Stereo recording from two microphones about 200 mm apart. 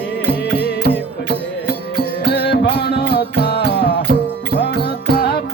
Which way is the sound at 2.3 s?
55° left (ahead or behind).